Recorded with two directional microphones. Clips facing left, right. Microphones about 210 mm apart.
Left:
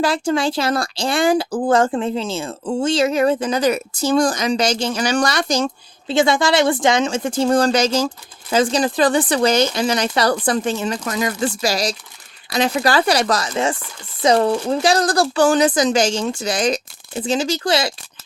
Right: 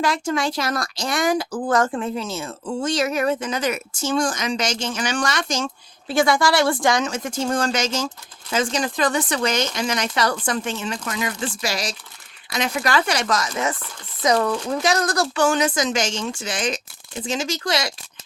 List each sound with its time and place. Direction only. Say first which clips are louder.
0.0 s speech: left 4 dB; 30° left (ahead or behind)
6.1 s speech: left 2 dB; 25° left (ahead or behind)